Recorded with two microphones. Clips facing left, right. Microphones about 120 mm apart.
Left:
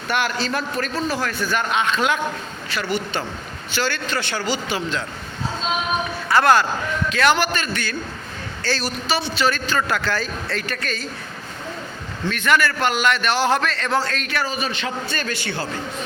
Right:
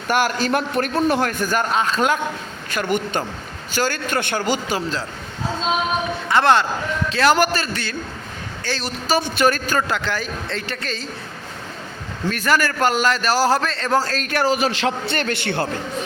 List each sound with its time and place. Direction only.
0.1 s a man's voice: 45° right (ahead or behind)
6.2 s a man's voice: 25° right (ahead or behind)
8.6 s a woman's voice: 20° right (ahead or behind)
9.0 s a man's voice: 45° right (ahead or behind)
9.8 s speech: 20° right (ahead or behind)
12.3 s a man's voice: 40° right (ahead or behind)
14.4 s a man's voice: 90° right; by 15.6 s 60° right (ahead or behind)